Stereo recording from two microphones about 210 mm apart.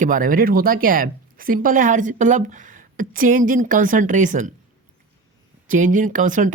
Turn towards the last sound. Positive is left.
turn(degrees=-40)  # may be behind; listen again after turning